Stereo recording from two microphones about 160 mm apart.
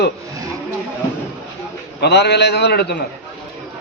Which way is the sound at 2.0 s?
90° left.